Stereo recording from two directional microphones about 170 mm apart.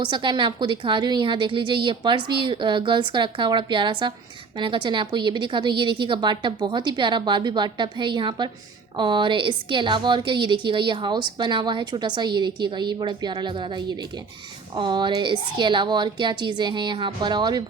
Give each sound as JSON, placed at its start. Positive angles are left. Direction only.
{"t": 0.0, "sound": "a woman's voice", "side_deg": -25}